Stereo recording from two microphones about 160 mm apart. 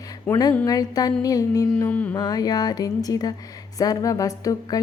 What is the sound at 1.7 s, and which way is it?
Mantra, 10° left (ahead or behind).